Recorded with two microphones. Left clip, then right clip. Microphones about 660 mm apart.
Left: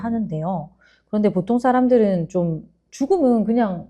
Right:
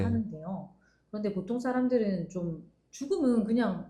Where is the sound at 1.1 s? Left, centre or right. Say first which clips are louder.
Left 13 dB; left.